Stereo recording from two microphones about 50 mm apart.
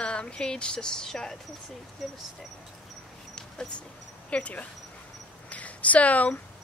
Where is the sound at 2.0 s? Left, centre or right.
Centre.